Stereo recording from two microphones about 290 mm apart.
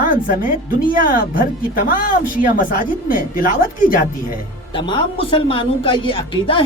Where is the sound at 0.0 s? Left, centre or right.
Left.